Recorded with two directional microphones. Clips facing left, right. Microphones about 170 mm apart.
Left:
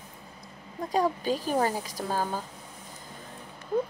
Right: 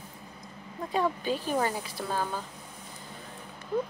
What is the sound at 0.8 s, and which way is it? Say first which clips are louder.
Speech: left 2 dB; 40° left (ahead or behind).